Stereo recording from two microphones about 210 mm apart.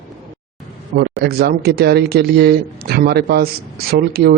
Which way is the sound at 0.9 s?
50° right (ahead or behind).